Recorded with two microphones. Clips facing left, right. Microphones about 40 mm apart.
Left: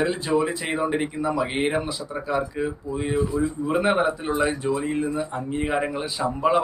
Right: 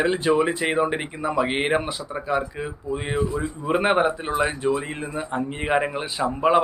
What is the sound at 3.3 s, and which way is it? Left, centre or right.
Speech, right.